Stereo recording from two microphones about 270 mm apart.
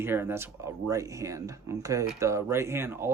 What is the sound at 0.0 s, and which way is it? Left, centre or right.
Speech, centre.